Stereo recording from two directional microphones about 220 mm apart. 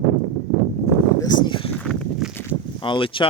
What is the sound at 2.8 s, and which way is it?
Speech, 20° left (ahead or behind).